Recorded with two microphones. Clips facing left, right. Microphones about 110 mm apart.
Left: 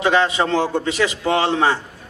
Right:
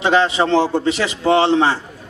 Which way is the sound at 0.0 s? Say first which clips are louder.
Right 2 dB; 30° right (ahead or behind).